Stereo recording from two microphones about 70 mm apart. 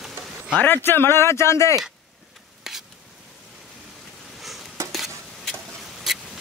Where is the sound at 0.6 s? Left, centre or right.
Left.